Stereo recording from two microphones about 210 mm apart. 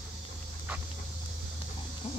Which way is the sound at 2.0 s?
30° left (ahead or behind).